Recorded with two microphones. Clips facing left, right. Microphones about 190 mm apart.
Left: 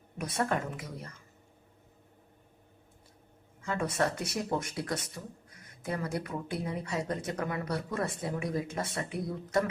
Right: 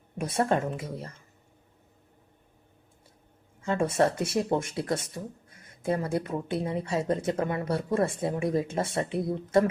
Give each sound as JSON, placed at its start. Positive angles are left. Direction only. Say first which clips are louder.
{"t": 0.2, "sound": "speech", "louder": "right 5 dB", "side_deg": -25}
{"t": 3.6, "sound": "speech", "louder": "right 6 dB", "side_deg": -25}